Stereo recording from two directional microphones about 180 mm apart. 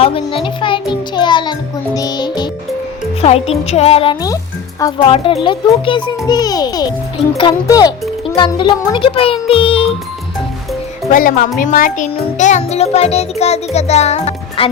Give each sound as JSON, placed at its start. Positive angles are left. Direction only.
{"t": 0.0, "sound": "music", "side_deg": 30}
{"t": 11.1, "sound": "speech", "side_deg": 50}
{"t": 11.6, "sound": "music", "side_deg": 45}